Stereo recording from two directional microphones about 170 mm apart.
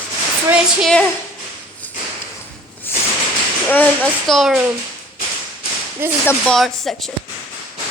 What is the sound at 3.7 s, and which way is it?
Speech, 10° left (ahead or behind).